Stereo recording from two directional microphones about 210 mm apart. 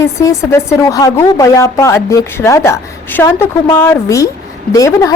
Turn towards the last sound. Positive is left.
turn(degrees=15)  # may be behind; listen again after turning